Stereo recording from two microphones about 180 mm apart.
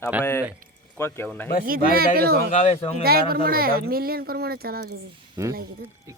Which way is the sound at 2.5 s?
35° left (ahead or behind).